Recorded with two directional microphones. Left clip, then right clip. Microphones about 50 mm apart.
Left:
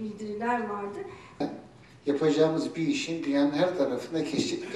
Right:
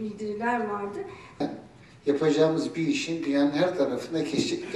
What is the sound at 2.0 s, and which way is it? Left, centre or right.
Speech, centre.